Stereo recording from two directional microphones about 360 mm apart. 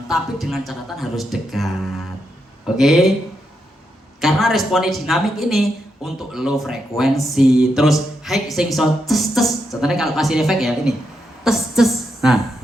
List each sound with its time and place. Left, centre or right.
0.1 s a woman's voice: centre
4.2 s a woman's voice: centre